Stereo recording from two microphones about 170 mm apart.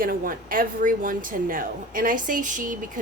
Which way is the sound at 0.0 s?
55° right (ahead or behind).